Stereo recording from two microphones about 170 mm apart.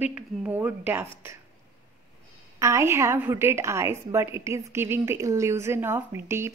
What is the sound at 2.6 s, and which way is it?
A woman's voice, 15° right (ahead or behind).